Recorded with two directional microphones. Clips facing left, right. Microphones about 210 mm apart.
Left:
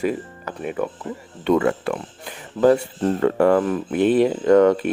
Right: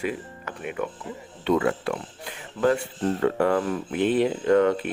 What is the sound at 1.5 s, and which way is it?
Speech, 50° left (ahead or behind).